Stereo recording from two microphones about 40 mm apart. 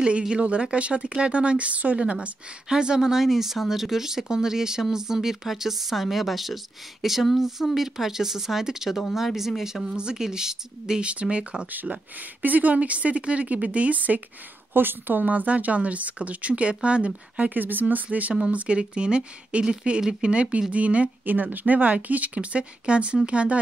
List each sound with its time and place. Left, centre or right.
0.3 s speech: right
2.7 s speech: centre
11.0 s speech: right
11.9 s speech: right
14.7 s speech: right
17.6 s speech: right
18.5 s speech: right
21.3 s speech: right